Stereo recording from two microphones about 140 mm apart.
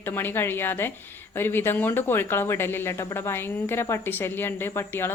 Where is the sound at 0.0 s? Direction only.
15° left (ahead or behind).